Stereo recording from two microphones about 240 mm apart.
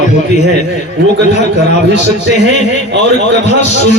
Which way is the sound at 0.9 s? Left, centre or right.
Right.